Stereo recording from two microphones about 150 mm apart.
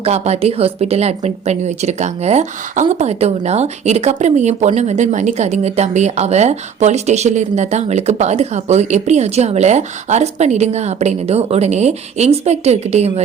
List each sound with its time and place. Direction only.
0.0 s a woman's voice: 45° right (ahead or behind)